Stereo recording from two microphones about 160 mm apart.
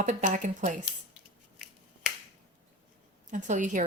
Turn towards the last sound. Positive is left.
turn(degrees=-50)  # may be behind; listen again after turning